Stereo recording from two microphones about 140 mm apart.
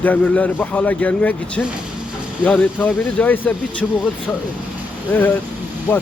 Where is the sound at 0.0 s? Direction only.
10° left (ahead or behind).